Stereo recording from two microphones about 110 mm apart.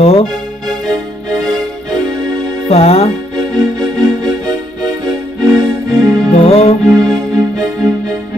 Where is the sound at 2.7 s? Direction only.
70° left (ahead or behind).